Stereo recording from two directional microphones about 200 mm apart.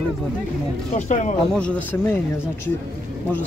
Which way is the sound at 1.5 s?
5° left (ahead or behind).